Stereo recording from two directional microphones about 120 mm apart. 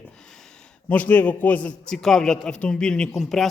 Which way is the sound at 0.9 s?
10° left (ahead or behind).